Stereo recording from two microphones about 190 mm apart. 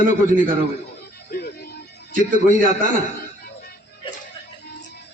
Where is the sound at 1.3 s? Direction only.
50° left (ahead or behind).